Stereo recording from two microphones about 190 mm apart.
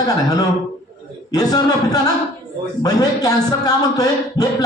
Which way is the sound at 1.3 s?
20° left (ahead or behind).